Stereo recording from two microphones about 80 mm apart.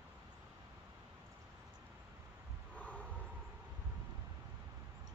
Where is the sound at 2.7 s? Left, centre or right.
Centre.